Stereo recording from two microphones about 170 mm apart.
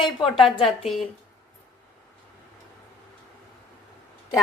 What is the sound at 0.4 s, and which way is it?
Speech, 30° left (ahead or behind).